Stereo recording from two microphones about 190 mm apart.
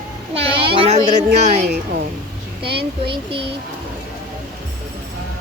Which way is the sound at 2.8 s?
25° right (ahead or behind).